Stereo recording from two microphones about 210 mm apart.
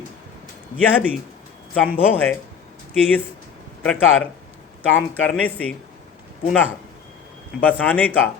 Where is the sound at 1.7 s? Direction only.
10° left (ahead or behind).